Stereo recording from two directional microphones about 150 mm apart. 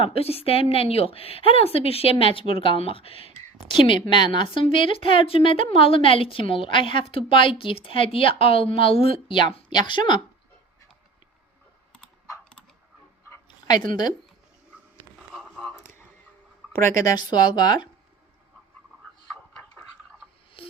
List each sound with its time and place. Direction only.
0.0 s a woman's voice: 40° left (ahead or behind)
13.3 s dog: 25° left (ahead or behind)
15.4 s a sound: centre (ahead or behind)
17.0 s speech: 25° left (ahead or behind)
20.6 s busy signal: 35° left (ahead or behind)